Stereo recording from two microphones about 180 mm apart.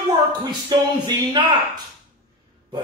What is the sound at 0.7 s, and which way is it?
Speech, 25° right (ahead or behind).